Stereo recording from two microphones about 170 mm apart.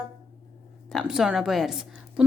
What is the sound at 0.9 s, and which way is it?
A woman's voice, centre (ahead or behind).